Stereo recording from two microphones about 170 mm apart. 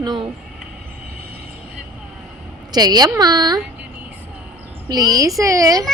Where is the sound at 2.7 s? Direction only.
25° right (ahead or behind).